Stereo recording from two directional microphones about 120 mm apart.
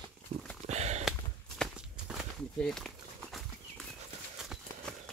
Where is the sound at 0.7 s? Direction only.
70° right (ahead or behind).